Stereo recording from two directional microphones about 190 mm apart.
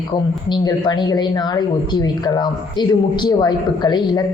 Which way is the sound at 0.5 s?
20° left (ahead or behind).